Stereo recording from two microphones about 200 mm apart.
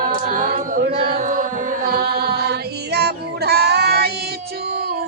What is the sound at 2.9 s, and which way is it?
Child singing, 55° right (ahead or behind).